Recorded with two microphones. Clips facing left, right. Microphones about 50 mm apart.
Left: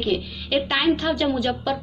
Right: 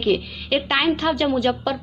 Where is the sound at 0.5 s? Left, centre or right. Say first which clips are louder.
Right 1 dB; right.